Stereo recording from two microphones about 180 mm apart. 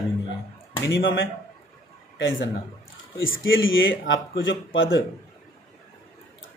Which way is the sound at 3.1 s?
90° left.